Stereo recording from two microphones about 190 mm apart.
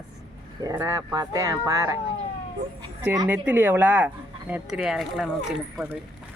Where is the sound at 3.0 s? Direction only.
15° right (ahead or behind).